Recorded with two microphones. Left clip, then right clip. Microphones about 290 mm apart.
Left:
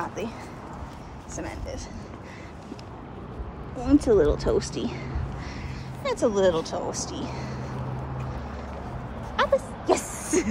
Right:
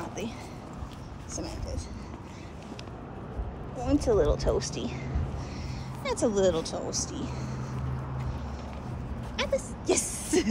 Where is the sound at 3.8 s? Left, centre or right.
Centre.